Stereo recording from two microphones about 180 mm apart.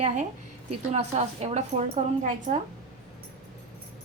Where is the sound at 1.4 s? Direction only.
40° right (ahead or behind).